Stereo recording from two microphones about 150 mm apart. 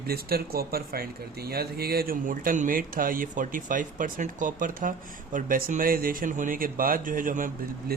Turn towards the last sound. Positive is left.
turn(degrees=-65)  # may be behind; listen again after turning